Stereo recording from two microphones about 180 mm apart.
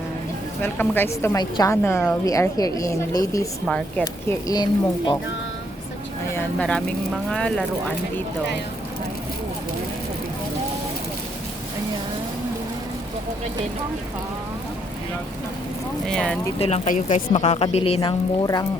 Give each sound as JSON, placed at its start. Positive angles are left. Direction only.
{"t": 0.6, "sound": "speech", "side_deg": 10}
{"t": 3.7, "sound": "speech", "side_deg": 5}
{"t": 6.3, "sound": "speech", "side_deg": 5}
{"t": 16.0, "sound": "speech", "side_deg": 5}
{"t": 16.6, "sound": "speech", "side_deg": 35}